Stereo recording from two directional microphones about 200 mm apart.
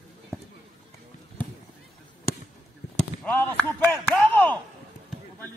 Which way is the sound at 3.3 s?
10° left (ahead or behind).